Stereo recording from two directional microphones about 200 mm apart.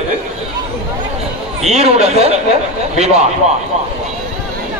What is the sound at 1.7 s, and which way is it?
Speech, 30° right (ahead or behind).